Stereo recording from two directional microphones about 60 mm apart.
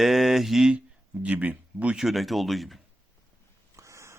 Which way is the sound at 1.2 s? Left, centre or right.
Right.